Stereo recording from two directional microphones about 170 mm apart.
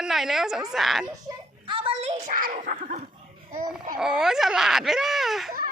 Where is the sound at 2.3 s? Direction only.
50° right (ahead or behind).